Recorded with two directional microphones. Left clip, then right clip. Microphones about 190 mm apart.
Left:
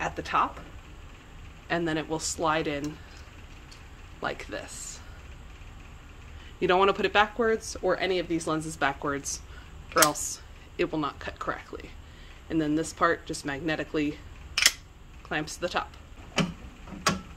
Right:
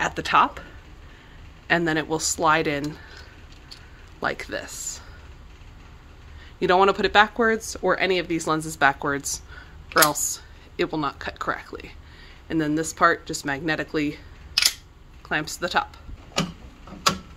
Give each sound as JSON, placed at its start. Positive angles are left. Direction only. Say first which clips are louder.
{"t": 0.0, "sound": "speech", "louder": "right 7 dB", "side_deg": -60}
{"t": 1.7, "sound": "speech", "louder": "right 7 dB", "side_deg": -40}
{"t": 4.2, "sound": "speech", "louder": "right 6 dB", "side_deg": -35}
{"t": 6.6, "sound": "speech", "louder": "right 4 dB", "side_deg": -25}
{"t": 15.2, "sound": "speech", "louder": "right 5 dB", "side_deg": -35}